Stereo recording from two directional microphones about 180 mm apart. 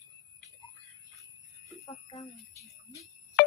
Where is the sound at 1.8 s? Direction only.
20° left (ahead or behind).